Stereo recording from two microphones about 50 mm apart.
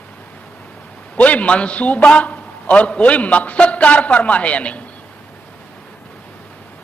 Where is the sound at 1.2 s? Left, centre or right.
Left.